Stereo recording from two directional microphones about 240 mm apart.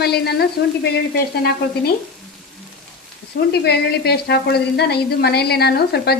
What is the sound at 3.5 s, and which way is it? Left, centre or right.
Speech, left.